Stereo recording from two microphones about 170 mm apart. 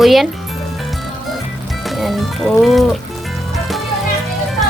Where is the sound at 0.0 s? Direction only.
Centre (ahead or behind).